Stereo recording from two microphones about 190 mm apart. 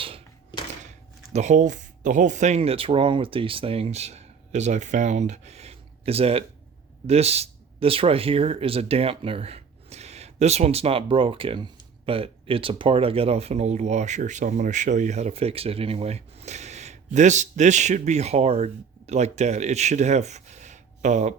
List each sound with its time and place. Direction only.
0.9 s speech: 35° right (ahead or behind)